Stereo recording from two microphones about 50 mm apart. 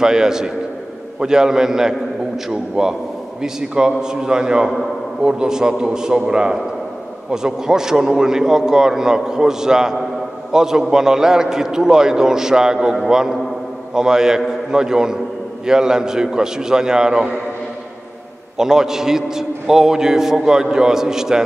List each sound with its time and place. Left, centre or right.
0.0 s a man's voice: centre
18.6 s a man's voice: centre